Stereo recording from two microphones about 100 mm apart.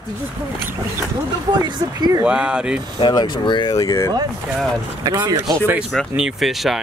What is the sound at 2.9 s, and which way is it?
Speech, 50° left (ahead or behind).